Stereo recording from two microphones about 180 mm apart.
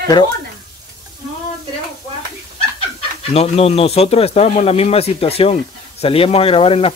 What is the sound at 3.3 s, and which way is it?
Speech, 35° left (ahead or behind).